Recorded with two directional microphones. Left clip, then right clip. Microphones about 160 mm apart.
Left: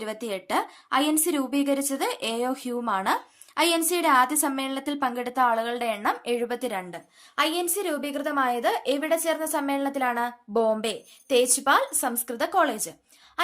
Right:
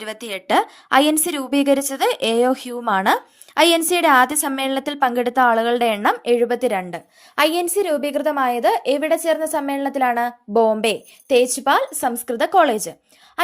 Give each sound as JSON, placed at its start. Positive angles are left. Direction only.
{"t": 0.0, "sound": "a woman's voice", "side_deg": -40}
{"t": 6.3, "sound": "a woman's voice", "side_deg": -35}